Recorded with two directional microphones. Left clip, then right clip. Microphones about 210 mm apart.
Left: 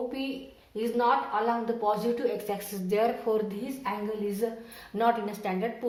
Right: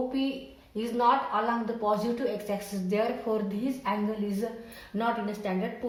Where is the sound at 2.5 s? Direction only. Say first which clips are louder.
Left 1 dB; 45° left (ahead or behind).